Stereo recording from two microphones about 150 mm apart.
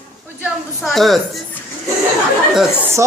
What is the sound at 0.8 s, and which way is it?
Speech, centre (ahead or behind).